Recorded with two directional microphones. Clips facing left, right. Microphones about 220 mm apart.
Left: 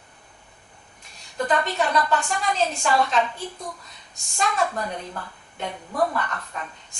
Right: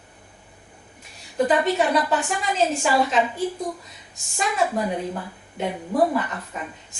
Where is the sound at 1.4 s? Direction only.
5° right (ahead or behind).